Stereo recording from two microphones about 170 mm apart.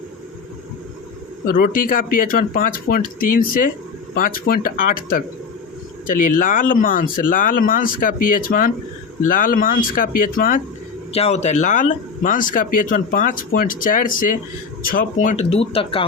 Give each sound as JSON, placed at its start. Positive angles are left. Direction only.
{"t": 1.5, "sound": "speech", "side_deg": 60}
{"t": 11.1, "sound": "speech", "side_deg": 40}